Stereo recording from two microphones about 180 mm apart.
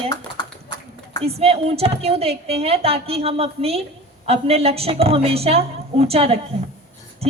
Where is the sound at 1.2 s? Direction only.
35° right (ahead or behind).